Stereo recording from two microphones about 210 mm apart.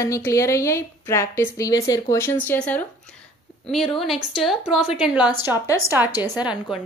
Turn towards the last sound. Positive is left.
turn(degrees=-5)  # may be behind; listen again after turning